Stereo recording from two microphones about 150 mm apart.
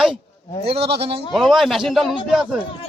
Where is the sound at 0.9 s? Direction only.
40° right (ahead or behind).